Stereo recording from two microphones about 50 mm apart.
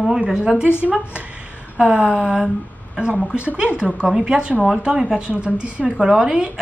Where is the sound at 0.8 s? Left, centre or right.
Right.